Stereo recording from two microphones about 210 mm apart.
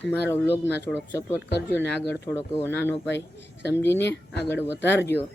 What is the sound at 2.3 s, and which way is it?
Speech, 15° left (ahead or behind).